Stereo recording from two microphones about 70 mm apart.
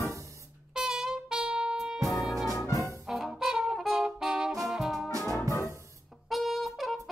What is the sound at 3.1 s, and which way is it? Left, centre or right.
Music, centre.